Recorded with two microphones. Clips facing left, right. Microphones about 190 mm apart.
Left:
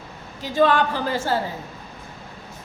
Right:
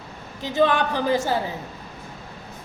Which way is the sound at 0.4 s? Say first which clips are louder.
Left 1 dB; 15° right (ahead or behind).